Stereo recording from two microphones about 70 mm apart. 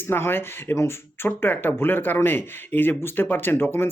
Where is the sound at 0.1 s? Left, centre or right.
Left.